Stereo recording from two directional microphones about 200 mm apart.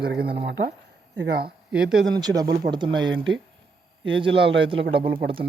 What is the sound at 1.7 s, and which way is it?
Speech, 5° right (ahead or behind).